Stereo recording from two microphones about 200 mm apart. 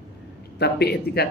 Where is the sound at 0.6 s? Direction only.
55° left (ahead or behind).